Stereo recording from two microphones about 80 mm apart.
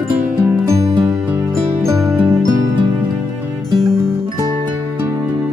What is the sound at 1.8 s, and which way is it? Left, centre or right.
Music, right.